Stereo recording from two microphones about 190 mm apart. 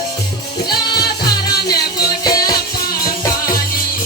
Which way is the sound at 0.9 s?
20° left (ahead or behind).